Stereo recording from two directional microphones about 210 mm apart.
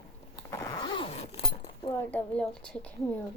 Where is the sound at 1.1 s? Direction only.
30° left (ahead or behind).